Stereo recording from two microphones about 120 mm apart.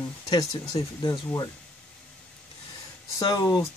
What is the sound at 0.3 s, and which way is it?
Speech, 30° left (ahead or behind).